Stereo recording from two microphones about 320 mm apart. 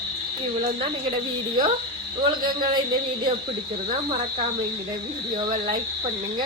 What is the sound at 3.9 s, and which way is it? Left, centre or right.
Cricket, centre.